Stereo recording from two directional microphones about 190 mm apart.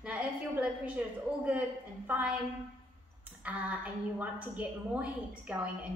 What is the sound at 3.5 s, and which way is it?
A woman's voice, 5° right (ahead or behind).